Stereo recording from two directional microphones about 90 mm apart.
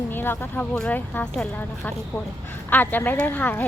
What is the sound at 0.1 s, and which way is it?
Speech, 20° left (ahead or behind).